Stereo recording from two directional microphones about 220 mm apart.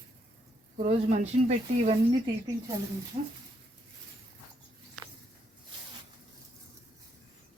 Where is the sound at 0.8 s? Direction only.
30° right (ahead or behind).